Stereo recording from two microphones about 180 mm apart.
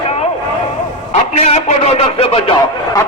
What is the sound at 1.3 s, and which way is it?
Speech, 35° left (ahead or behind).